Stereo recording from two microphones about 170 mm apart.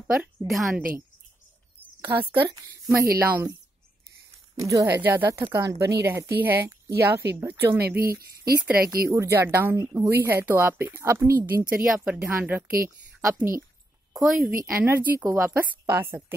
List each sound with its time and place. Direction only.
0.0 s a woman's voice: 10° right (ahead or behind)
2.0 s a woman's voice: 10° right (ahead or behind)
4.6 s speech: 20° right (ahead or behind)
8.7 s speech: 60° right (ahead or behind)
9.1 s speech: 15° right (ahead or behind)
11.8 s speech: 5° right (ahead or behind)
14.1 s a woman's voice: centre (ahead or behind)
14.7 s speech: 10° right (ahead or behind)